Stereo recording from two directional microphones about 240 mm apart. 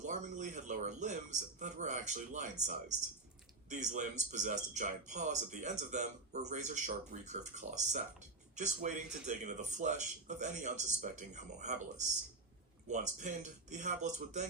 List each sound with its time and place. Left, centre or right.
0.0 s speech: right